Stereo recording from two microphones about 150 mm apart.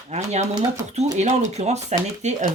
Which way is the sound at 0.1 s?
50° right (ahead or behind).